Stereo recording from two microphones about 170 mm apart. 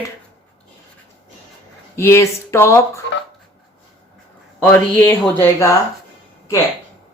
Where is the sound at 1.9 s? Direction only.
15° left (ahead or behind).